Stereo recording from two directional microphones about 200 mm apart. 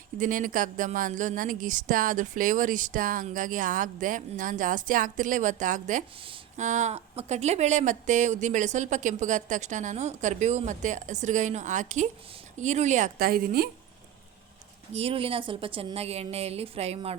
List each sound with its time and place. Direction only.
0.2 s speech: 40° right (ahead or behind)
14.9 s a woman's voice: 30° right (ahead or behind)